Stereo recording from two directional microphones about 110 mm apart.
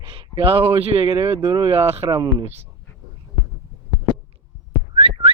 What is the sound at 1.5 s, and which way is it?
Speech, 40° right (ahead or behind).